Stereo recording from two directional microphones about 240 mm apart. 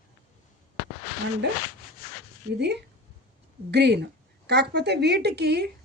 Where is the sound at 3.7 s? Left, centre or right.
Right.